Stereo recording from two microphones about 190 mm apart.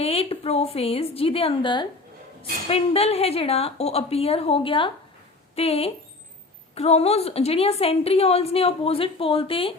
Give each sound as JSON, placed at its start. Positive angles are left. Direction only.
{"t": 0.0, "sound": "a woman's voice", "side_deg": 30}